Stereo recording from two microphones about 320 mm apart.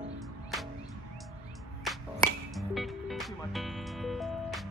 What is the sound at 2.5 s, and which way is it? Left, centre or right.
Music, centre.